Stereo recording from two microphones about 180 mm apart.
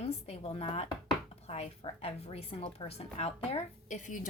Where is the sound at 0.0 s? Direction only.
35° left (ahead or behind).